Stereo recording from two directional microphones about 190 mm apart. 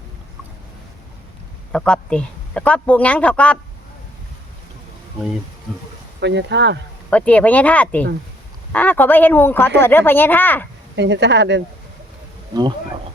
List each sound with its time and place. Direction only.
1.7 s a man's voice: 5° left (ahead or behind)
6.1 s speech: 65° right (ahead or behind)
7.1 s a man's voice: 5° left (ahead or behind)
10.9 s speech: 65° right (ahead or behind)